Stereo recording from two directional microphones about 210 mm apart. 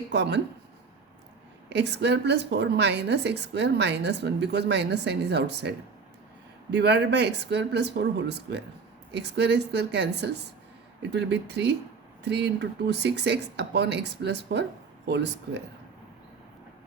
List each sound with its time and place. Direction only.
0.1 s a woman's voice: 55° right (ahead or behind)
1.7 s a woman's voice: 55° right (ahead or behind)